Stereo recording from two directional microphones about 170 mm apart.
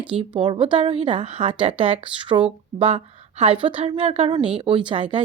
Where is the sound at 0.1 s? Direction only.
30° right (ahead or behind).